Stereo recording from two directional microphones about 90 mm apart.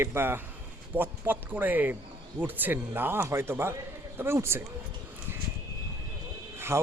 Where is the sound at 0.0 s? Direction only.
25° right (ahead or behind).